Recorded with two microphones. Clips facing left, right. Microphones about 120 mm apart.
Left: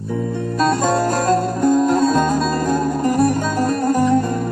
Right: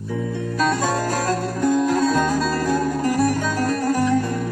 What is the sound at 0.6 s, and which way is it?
Music, 45° left (ahead or behind).